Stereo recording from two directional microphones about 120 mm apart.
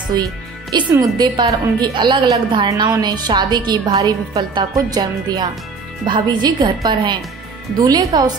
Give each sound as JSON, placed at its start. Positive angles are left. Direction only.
{"t": 0.1, "sound": "a woman's voice", "side_deg": -35}